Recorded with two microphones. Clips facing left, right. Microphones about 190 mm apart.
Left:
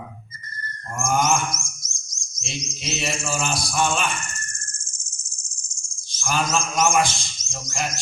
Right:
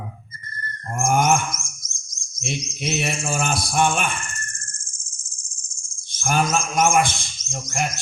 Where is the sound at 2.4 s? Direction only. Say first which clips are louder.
Right 5 dB; 55° right (ahead or behind).